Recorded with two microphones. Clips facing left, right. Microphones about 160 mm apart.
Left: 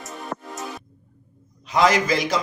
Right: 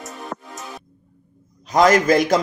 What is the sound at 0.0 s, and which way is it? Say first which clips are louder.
Music: even; centre (ahead or behind).